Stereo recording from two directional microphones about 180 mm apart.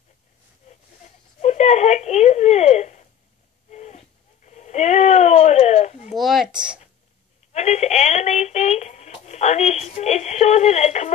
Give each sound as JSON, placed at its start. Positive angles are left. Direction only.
{"t": 1.4, "sound": "speech", "side_deg": 40}
{"t": 3.7, "sound": "a sound", "side_deg": 40}
{"t": 6.0, "sound": "speech", "side_deg": 0}
{"t": 7.5, "sound": "speech", "side_deg": 40}